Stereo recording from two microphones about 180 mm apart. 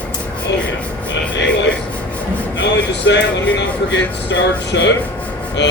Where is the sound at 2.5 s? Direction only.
80° left.